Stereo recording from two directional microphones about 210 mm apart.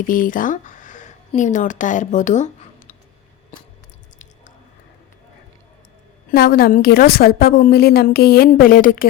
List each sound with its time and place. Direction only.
0.1 s speech: 40° left (ahead or behind)
6.3 s a woman's voice: 50° left (ahead or behind)